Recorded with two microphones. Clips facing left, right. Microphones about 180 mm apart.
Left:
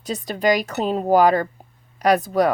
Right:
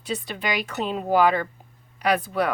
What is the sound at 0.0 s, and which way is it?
Speech, 40° left (ahead or behind).